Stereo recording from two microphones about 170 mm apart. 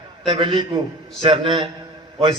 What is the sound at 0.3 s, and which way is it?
A man's voice, 30° right (ahead or behind).